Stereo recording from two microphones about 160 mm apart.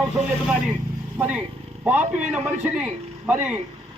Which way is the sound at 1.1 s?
10° right (ahead or behind).